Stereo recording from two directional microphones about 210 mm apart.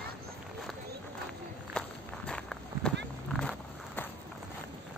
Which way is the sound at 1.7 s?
5° left (ahead or behind).